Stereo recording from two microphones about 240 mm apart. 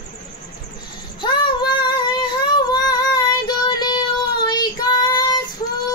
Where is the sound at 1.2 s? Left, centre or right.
Centre.